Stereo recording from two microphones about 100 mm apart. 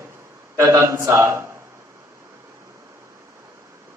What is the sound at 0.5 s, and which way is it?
Speech, 30° right (ahead or behind).